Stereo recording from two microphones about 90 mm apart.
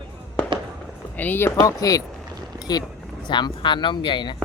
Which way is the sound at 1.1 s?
20° left (ahead or behind).